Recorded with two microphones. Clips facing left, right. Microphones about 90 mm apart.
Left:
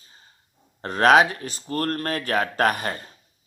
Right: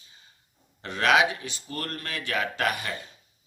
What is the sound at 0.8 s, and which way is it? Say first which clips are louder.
Speech: left 6 dB; 40° left (ahead or behind).